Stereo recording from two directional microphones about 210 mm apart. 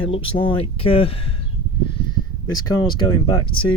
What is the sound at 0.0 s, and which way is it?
Speech, 25° left (ahead or behind).